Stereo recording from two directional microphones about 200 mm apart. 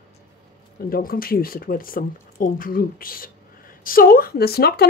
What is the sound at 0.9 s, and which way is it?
A woman's voice, 45° left (ahead or behind).